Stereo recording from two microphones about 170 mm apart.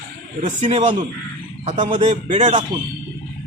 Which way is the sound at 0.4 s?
40° right (ahead or behind).